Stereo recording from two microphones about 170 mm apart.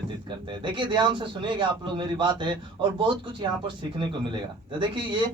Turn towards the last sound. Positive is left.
turn(degrees=-25)  # may be behind; listen again after turning